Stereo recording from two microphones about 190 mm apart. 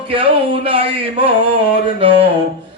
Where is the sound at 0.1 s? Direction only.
30° right (ahead or behind).